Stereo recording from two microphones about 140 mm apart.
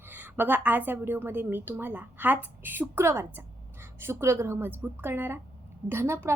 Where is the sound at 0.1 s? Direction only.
15° right (ahead or behind).